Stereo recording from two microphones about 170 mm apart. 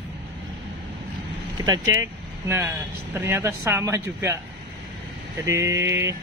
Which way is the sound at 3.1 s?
15° right (ahead or behind).